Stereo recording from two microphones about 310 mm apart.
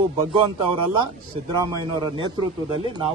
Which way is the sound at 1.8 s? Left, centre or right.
Centre.